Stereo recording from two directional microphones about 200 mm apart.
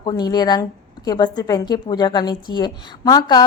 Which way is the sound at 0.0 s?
20° left (ahead or behind).